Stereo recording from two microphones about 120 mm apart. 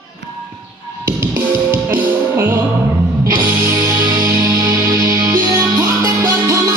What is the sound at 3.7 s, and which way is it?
Music, 30° right (ahead or behind).